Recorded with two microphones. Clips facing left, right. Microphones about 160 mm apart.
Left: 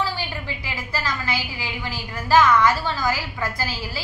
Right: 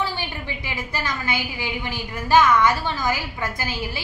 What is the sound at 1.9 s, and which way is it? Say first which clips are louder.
A woman's voice: even; 20° right (ahead or behind).